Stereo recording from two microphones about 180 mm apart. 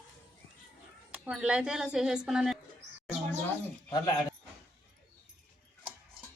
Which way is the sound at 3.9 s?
20° left (ahead or behind).